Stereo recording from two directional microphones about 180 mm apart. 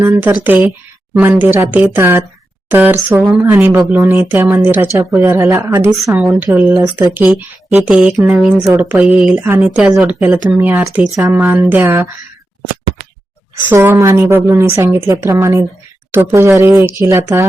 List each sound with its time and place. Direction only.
0.0 s speech: 10° right (ahead or behind)
13.7 s speech: 10° right (ahead or behind)